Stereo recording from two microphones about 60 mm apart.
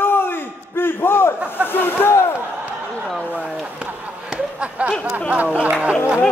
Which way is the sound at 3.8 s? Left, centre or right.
Centre.